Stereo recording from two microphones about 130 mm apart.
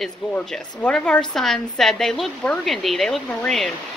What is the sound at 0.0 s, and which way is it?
A woman's voice, 5° left (ahead or behind).